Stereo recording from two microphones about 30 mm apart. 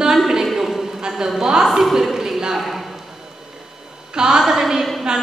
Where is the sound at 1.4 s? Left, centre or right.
Right.